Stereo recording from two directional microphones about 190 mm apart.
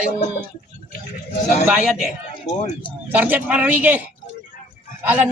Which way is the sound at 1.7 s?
5° right (ahead or behind).